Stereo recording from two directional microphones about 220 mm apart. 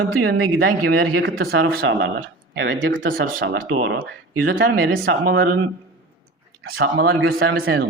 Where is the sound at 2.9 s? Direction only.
40° right (ahead or behind); by 3.9 s 65° right (ahead or behind).